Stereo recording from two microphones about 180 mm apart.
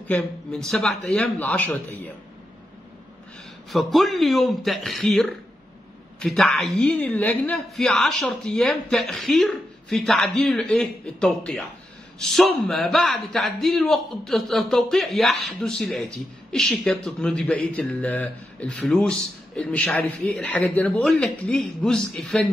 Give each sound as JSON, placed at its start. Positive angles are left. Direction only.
{"t": 0.1, "sound": "a man's voice", "side_deg": 5}
{"t": 3.7, "sound": "speech", "side_deg": 0}